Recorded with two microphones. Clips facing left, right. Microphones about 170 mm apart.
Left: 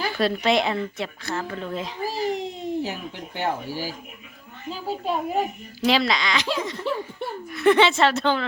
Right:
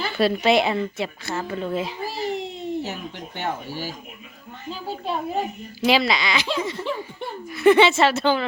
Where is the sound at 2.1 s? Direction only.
40° left (ahead or behind).